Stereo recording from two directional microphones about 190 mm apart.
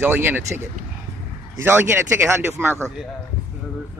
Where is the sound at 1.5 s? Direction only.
10° right (ahead or behind).